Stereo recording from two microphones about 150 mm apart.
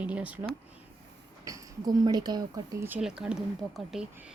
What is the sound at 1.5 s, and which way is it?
Speech, 25° right (ahead or behind).